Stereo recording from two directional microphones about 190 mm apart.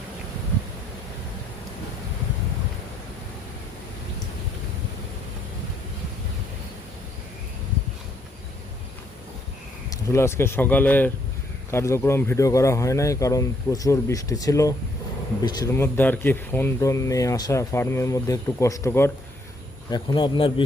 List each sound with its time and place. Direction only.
9.9 s speech: 15° left (ahead or behind)
19.9 s speech: 25° left (ahead or behind)